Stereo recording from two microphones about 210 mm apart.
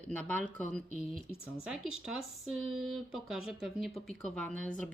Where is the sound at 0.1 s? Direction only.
5° left (ahead or behind).